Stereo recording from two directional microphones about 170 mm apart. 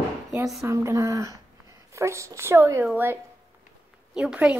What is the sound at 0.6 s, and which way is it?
A woman's voice, 15° right (ahead or behind).